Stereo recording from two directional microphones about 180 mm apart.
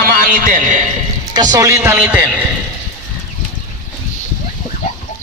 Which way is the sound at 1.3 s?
20° right (ahead or behind).